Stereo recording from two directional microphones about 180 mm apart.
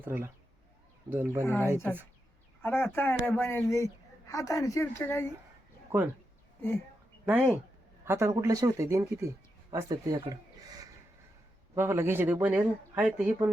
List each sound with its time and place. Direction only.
0.0 s speech: 10° right (ahead or behind)
2.6 s a woman's voice: 10° left (ahead or behind)
5.9 s speech: 10° right (ahead or behind)
7.3 s speech: 10° right (ahead or behind)
11.7 s speech: 15° right (ahead or behind)